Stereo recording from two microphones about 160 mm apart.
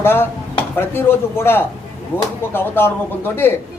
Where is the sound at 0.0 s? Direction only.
15° left (ahead or behind).